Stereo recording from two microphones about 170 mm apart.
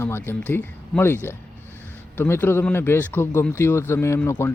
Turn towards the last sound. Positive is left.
turn(degrees=15)  # may be behind; listen again after turning